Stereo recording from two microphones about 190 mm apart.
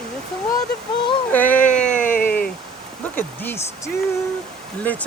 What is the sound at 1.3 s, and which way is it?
Speech, 10° left (ahead or behind).